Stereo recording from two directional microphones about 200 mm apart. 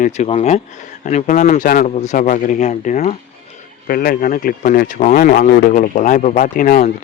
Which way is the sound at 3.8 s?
45° left (ahead or behind).